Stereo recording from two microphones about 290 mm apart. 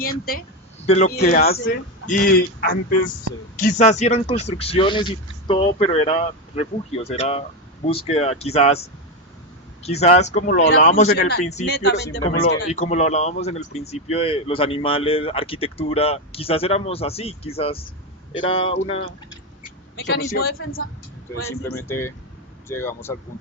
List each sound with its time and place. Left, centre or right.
0.0 s speech: left
9.8 s speech: left
11.8 s speech: left
12.7 s speech: left
20.0 s speech: left
21.8 s speech: centre